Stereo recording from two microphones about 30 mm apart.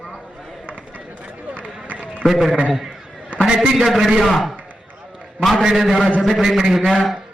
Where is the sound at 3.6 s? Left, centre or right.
Right.